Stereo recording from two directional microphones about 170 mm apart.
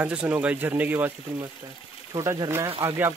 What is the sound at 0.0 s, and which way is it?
Speech, 10° right (ahead or behind).